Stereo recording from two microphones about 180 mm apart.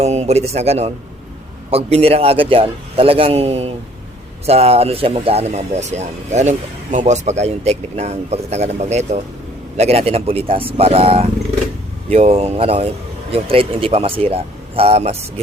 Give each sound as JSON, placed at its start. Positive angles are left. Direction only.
{"t": 0.0, "sound": "a man's voice", "side_deg": -40}